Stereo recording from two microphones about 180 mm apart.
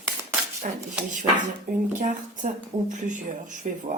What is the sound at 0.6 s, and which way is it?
Speech, 40° right (ahead or behind).